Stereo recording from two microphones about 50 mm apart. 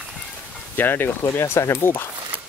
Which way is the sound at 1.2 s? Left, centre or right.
Left.